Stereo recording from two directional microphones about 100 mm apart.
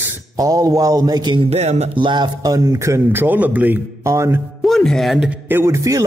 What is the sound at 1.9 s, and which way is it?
Speech, 50° right (ahead or behind).